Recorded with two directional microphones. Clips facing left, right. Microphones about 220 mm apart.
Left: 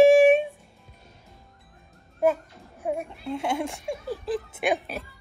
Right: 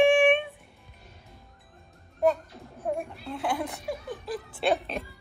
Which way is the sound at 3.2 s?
25° left (ahead or behind).